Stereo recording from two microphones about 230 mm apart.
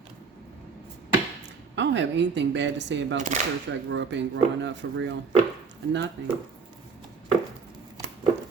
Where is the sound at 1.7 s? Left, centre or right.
Right.